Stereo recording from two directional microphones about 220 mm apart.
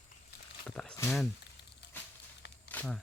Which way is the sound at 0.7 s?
5° left (ahead or behind).